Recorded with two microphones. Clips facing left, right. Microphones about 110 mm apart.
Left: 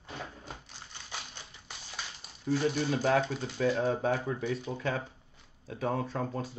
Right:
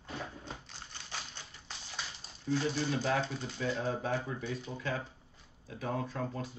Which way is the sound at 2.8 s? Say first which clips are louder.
Left 4 dB; 45° left (ahead or behind).